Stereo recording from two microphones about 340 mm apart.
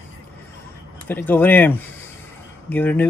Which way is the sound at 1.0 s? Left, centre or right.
Centre.